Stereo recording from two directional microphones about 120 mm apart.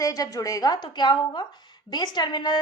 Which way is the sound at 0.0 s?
30° left (ahead or behind).